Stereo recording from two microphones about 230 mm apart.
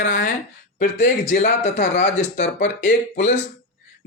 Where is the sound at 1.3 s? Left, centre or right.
Left.